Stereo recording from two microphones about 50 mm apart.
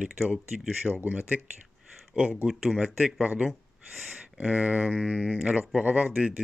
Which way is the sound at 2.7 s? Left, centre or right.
Right.